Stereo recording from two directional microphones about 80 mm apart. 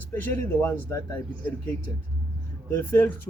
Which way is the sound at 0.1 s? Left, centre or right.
Left.